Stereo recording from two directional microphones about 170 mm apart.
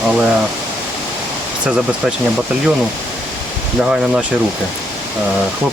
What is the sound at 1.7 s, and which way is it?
Speech, 5° right (ahead or behind).